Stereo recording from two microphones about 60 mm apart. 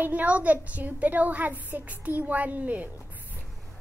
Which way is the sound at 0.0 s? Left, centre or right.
Right.